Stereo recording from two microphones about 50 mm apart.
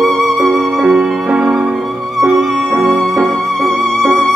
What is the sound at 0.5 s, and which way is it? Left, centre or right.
Music, right.